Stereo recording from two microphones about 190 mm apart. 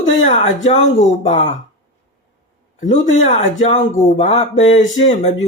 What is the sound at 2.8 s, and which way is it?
Speech, 35° left (ahead or behind).